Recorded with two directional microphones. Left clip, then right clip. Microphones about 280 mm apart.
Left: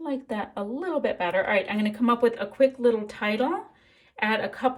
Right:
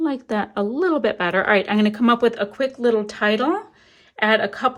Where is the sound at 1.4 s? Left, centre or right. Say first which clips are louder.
Right 7 dB; right.